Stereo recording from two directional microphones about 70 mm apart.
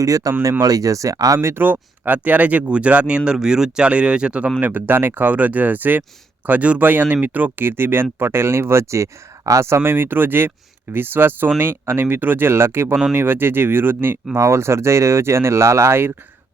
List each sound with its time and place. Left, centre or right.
0.0 s speech: right
1.4 s speech: right; by 4.5 s centre
4.6 s speech: right
14.3 s speech: right